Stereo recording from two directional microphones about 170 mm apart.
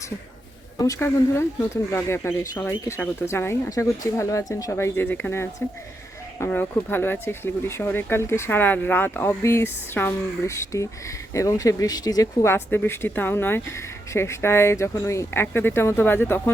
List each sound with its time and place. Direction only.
0.8 s speech: 15° left (ahead or behind)